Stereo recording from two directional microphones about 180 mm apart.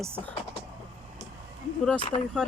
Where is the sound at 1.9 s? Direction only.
30° left (ahead or behind).